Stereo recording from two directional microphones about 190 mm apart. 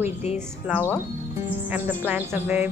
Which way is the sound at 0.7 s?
5° right (ahead or behind).